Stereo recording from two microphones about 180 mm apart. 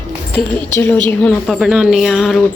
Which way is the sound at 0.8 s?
10° left (ahead or behind).